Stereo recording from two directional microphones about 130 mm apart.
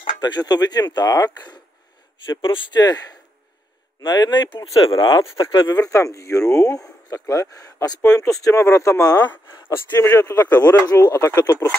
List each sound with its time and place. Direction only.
0.2 s speech: 30° left (ahead or behind)
5.7 s speech: 25° left (ahead or behind)
10.9 s speech: 30° left (ahead or behind)